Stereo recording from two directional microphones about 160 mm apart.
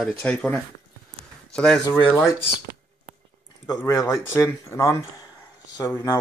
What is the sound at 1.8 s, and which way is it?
Speech, 20° left (ahead or behind).